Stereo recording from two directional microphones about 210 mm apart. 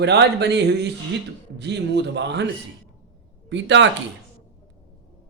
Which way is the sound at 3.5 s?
60° right (ahead or behind).